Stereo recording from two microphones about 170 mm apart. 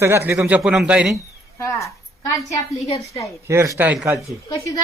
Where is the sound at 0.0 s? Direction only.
15° right (ahead or behind).